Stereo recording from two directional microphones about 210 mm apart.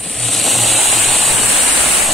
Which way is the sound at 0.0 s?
Centre (ahead or behind).